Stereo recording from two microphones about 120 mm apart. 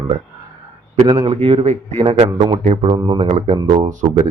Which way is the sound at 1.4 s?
65° right (ahead or behind).